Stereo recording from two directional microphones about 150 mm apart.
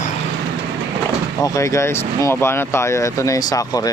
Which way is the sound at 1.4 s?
20° left (ahead or behind).